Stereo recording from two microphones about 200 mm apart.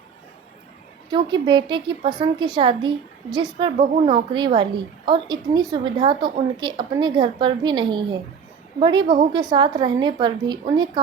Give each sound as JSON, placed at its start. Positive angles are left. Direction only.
{"t": 1.1, "sound": "a woman's voice", "side_deg": -25}